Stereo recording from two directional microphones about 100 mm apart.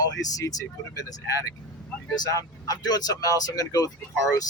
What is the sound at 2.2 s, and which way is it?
Speech, 40° left (ahead or behind).